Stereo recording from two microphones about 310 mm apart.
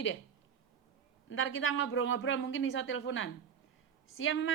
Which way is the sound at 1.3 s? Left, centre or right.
Left.